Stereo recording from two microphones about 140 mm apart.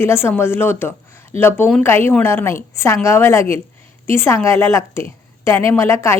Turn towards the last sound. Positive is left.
turn(degrees=20)  # may be behind; listen again after turning